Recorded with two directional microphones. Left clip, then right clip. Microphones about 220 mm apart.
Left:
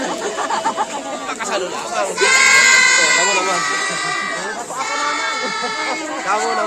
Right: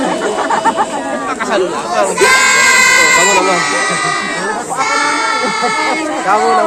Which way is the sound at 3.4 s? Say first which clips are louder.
Right 6 dB; 10° left (ahead or behind).